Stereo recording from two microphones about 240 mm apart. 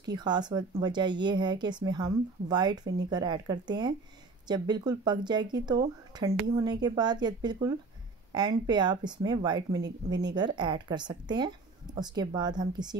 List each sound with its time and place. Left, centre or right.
0.0 s speech: centre